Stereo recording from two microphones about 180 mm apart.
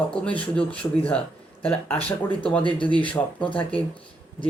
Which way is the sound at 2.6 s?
30° left (ahead or behind).